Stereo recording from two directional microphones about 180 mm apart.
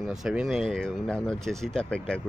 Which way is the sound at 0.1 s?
5° right (ahead or behind).